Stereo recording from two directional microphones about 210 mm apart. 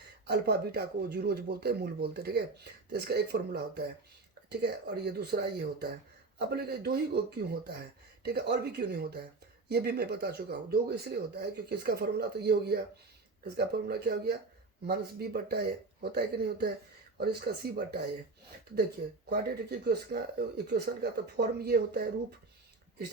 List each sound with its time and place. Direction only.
0.3 s speech: 50° right (ahead or behind)
19.3 s speech: 50° right (ahead or behind)